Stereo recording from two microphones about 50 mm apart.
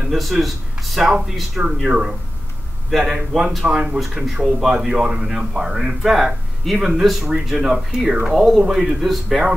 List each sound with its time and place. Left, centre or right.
0.1 s speech: centre
1.0 s a man's voice: centre
4.8 s a man's voice: centre